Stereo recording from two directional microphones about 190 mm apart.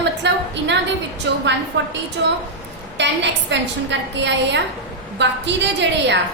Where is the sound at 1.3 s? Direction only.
70° right (ahead or behind).